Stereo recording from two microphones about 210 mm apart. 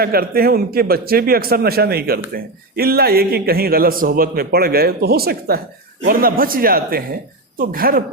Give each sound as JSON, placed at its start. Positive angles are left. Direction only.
{"t": 0.0, "sound": "a man's voice", "side_deg": -45}